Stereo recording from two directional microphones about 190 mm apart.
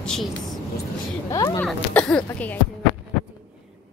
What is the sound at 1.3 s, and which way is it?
Speech, 20° left (ahead or behind).